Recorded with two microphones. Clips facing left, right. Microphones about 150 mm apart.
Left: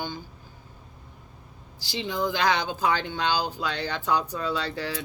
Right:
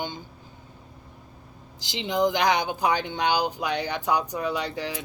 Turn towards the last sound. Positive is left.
turn(degrees=-15)  # may be behind; listen again after turning